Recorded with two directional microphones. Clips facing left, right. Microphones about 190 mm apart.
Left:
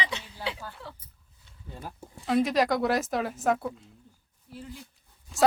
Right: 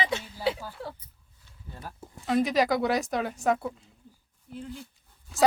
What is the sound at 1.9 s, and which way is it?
Speech, centre (ahead or behind).